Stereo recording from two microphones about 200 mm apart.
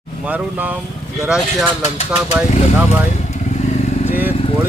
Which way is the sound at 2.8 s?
30° left (ahead or behind).